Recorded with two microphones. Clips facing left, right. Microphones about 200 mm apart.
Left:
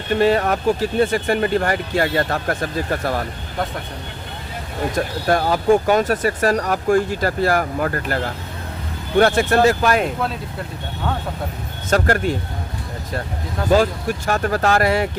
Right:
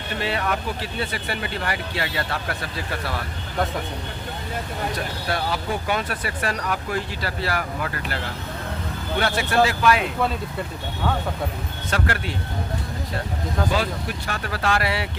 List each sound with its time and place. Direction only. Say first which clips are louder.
0.2 s speech: left 8 dB; 45° left (ahead or behind)
4.9 s speech: left 8 dB; 45° left (ahead or behind)
11.9 s speech: left 8 dB; 45° left (ahead or behind)
13.7 s speech: left 13 dB; 45° left (ahead or behind)